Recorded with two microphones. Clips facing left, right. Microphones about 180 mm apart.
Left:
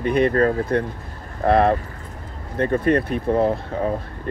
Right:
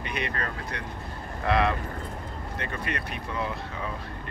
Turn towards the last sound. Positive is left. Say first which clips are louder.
# left 12 dB
turn(degrees=50)  # may be behind; listen again after turning